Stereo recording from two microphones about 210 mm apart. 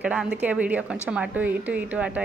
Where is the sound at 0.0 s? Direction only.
5° right (ahead or behind).